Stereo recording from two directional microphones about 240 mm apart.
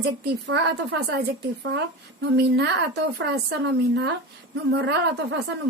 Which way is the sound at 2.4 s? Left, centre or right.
Right.